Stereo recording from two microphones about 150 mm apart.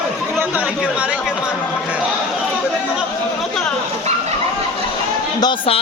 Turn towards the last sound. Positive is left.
turn(degrees=35)  # may be behind; listen again after turning